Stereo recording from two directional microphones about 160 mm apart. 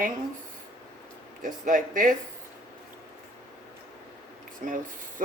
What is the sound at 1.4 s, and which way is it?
Speech, 55° right (ahead or behind).